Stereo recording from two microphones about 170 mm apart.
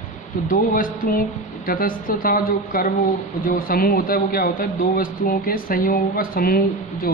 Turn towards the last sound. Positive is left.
turn(degrees=60)  # may be behind; listen again after turning